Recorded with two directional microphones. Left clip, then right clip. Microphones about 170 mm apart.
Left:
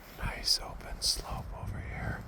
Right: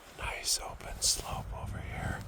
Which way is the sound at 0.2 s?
15° right (ahead or behind).